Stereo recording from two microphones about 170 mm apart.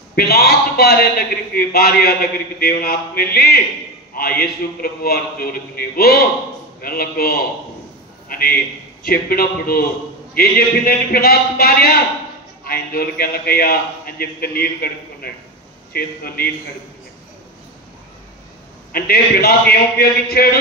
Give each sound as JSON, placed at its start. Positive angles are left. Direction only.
{"t": 0.1, "sound": "a man's voice", "side_deg": 65}
{"t": 18.9, "sound": "a man's voice", "side_deg": 65}